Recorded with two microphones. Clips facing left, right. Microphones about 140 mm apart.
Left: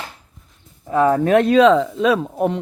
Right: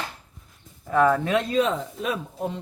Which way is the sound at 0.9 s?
25° left (ahead or behind).